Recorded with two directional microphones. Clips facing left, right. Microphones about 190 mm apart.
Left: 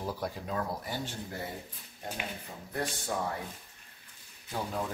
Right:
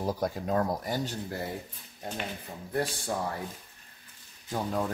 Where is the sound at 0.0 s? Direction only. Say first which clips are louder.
Right 5 dB; 45° right (ahead or behind).